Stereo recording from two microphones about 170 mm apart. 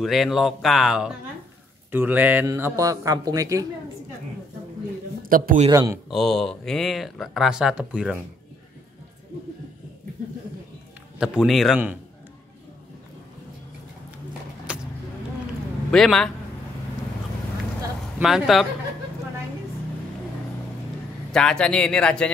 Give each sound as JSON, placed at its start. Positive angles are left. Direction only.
{"t": 0.0, "sound": "a man's voice", "side_deg": 0}
{"t": 5.2, "sound": "a man's voice", "side_deg": -55}
{"t": 5.7, "sound": "speech", "side_deg": -20}
{"t": 6.0, "sound": "speech", "side_deg": 0}
{"t": 11.1, "sound": "speech", "side_deg": -5}
{"t": 14.7, "sound": "vehicle", "side_deg": -5}
{"t": 15.9, "sound": "speech", "side_deg": 5}
{"t": 18.2, "sound": "speech", "side_deg": 0}
{"t": 21.3, "sound": "speech", "side_deg": 5}